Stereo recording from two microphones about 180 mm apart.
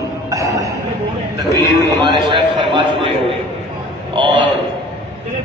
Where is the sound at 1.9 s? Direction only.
25° right (ahead or behind).